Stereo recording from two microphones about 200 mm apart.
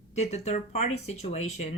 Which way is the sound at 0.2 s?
30° left (ahead or behind).